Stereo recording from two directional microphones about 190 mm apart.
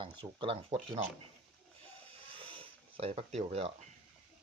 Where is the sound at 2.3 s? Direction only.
30° right (ahead or behind).